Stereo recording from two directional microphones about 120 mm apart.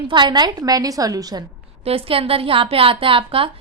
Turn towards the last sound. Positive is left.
turn(degrees=-50)  # may be behind; listen again after turning